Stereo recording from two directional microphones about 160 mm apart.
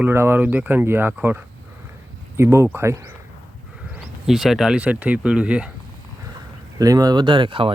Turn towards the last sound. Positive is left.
turn(degrees=-30)  # may be behind; listen again after turning